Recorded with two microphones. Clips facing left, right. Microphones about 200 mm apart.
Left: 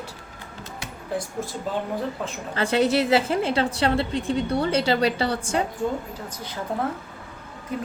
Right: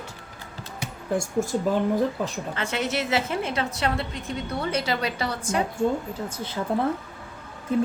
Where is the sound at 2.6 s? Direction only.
35° left (ahead or behind).